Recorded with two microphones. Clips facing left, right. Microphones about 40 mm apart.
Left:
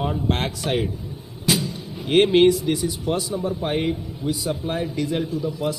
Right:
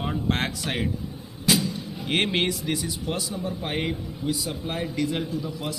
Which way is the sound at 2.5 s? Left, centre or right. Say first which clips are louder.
Left 6 dB; left.